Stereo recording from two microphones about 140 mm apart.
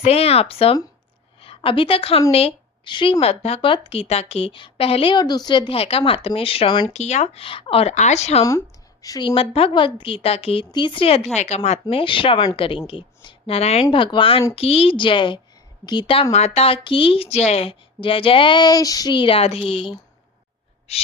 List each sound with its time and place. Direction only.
0.0 s a woman's voice: 45° left (ahead or behind); by 6.9 s 30° left (ahead or behind)
6.9 s speech: 50° left (ahead or behind)
9.0 s speech: 25° left (ahead or behind); by 13.8 s 50° left (ahead or behind)
13.9 s speech: 35° left (ahead or behind)
16.3 s speech: 50° left (ahead or behind)
20.9 s speech: 45° left (ahead or behind)